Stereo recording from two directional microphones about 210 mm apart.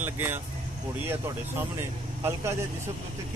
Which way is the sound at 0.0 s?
10° right (ahead or behind).